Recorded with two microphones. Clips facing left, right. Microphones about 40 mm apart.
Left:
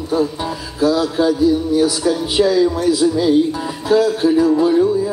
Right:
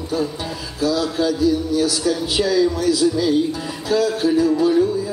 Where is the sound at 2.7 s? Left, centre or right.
Left.